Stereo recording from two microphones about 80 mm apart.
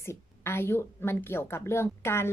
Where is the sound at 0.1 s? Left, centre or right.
Left.